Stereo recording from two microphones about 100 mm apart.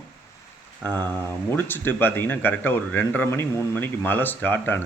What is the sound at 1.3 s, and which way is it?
Speech, 20° left (ahead or behind).